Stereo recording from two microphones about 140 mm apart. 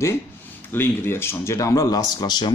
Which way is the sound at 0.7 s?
15° left (ahead or behind).